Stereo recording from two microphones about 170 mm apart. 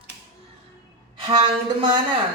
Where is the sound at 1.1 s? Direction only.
30° right (ahead or behind).